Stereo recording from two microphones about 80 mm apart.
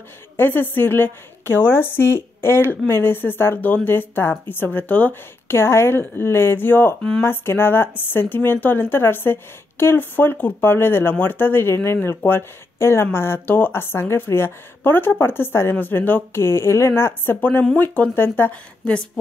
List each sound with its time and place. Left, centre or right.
0.4 s speech: left
7.0 s a woman's voice: centre
7.2 s speech: left
18.5 s a woman's voice: centre